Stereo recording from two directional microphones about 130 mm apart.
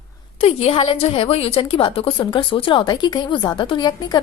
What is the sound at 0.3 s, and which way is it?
A woman's voice, 50° left (ahead or behind).